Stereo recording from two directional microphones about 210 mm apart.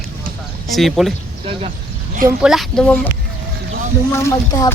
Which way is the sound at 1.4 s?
25° right (ahead or behind).